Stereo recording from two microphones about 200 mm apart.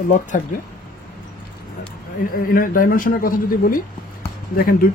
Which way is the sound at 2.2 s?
45° left (ahead or behind).